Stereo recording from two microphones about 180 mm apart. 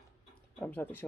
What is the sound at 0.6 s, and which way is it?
Speech, 10° left (ahead or behind).